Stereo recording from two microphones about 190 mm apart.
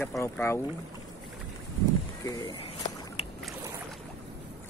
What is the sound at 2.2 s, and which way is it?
Speech, 15° left (ahead or behind).